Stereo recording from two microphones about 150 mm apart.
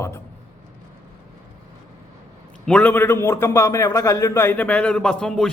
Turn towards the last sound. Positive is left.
turn(degrees=5)  # may be behind; listen again after turning